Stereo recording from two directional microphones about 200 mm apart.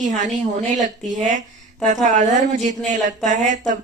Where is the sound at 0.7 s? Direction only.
40° right (ahead or behind).